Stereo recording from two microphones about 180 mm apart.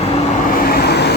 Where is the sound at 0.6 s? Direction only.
55° left (ahead or behind).